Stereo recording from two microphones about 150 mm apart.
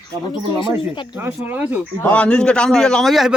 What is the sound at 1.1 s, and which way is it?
Speech, 15° right (ahead or behind).